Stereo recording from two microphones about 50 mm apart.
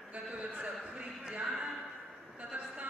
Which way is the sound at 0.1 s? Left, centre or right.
Right.